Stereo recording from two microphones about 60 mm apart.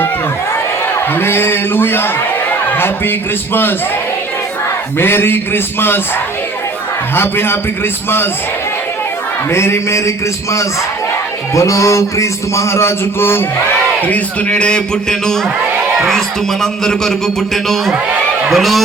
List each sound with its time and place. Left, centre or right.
1.2 s a sound: left
3.5 s speech: left
4.9 s speech: left
7.2 s speech: left
9.5 s a sound: left
11.5 s a man's voice: left
14.1 s speech: centre
16.0 s a man's voice: centre